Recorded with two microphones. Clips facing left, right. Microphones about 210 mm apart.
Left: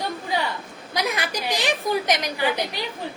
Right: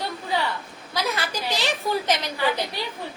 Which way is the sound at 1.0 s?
15° left (ahead or behind).